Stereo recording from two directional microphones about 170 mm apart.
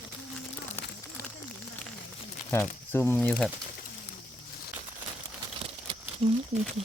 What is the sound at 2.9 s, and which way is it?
Speech, 15° left (ahead or behind).